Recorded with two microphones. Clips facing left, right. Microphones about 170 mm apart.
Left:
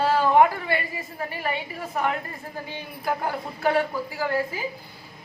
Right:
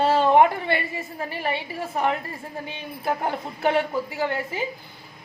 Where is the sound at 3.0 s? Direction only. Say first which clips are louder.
Right 1 dB; 25° right (ahead or behind).